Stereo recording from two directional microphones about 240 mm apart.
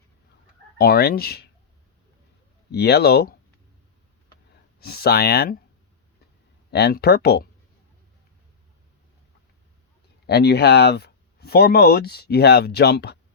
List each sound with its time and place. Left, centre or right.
0.8 s speech: left
2.7 s speech: left
4.8 s speech: left
6.7 s speech: left
10.2 s speech: left